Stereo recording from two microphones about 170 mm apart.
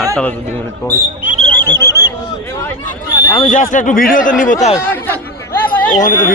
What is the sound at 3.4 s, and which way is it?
Speech, 50° left (ahead or behind).